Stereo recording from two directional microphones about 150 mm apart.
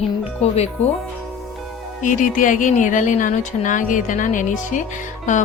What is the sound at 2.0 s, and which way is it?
Speech, 60° left (ahead or behind).